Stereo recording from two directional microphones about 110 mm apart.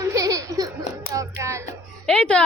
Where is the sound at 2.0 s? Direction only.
10° left (ahead or behind).